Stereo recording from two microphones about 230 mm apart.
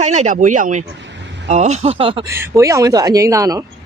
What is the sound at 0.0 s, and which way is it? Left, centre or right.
Speech, right.